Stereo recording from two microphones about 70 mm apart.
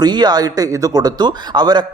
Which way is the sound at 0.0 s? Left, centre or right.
Right.